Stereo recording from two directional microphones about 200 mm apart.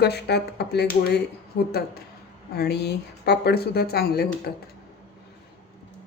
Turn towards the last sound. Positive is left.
turn(degrees=55)  # may be behind; listen again after turning